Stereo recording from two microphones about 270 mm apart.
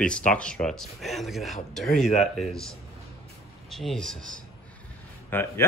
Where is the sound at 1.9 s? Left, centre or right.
Left.